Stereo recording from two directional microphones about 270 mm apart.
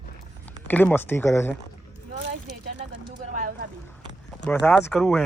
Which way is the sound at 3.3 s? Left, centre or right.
Right.